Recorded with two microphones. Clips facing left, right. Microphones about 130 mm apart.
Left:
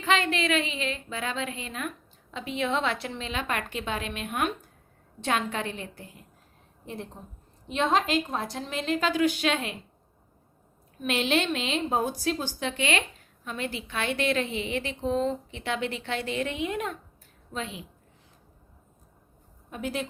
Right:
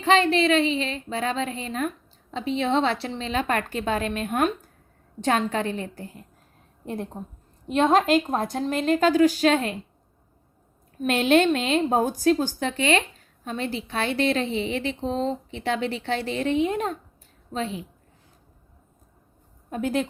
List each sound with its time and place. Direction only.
0.0 s a woman's voice: 35° right (ahead or behind)
6.8 s a woman's voice: 50° right (ahead or behind)
11.0 s a woman's voice: 45° right (ahead or behind)
19.7 s a woman's voice: 45° right (ahead or behind)